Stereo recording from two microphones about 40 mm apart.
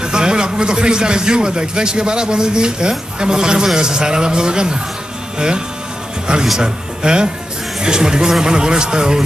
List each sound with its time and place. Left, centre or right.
0.0 s speech: centre
6.6 s speech: centre